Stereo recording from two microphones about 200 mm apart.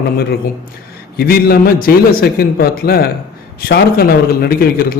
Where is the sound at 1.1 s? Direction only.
50° left (ahead or behind).